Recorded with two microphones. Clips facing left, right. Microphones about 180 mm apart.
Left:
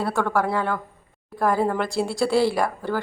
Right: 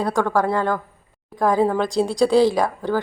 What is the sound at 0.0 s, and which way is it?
A woman's voice, 15° right (ahead or behind).